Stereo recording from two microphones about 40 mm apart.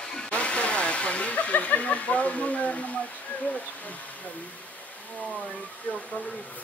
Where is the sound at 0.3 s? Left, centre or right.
Left.